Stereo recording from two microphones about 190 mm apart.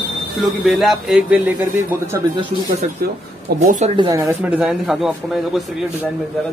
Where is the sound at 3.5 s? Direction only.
40° right (ahead or behind).